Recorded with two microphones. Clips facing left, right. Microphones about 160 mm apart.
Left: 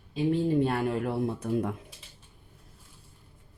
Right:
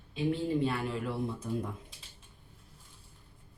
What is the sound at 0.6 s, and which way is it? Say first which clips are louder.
Speech: left 5 dB; 55° left (ahead or behind).